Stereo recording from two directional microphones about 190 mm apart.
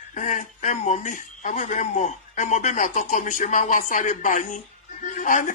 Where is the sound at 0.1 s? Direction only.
40° left (ahead or behind).